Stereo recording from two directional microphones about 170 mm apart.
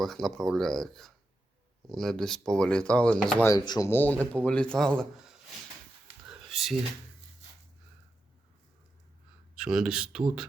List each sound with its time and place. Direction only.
0.0 s speech: centre (ahead or behind)
3.4 s speech: 25° left (ahead or behind)
3.8 s speech: 10° left (ahead or behind)
6.2 s a sound: centre (ahead or behind)
9.6 s speech: 5° right (ahead or behind)